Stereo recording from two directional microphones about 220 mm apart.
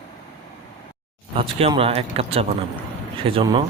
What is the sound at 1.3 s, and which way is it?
Speech, 25° right (ahead or behind).